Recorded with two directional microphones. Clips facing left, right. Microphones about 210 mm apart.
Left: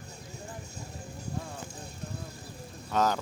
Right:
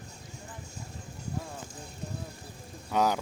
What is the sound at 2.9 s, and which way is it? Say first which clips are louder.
Speech: right 1 dB; 15° right (ahead or behind).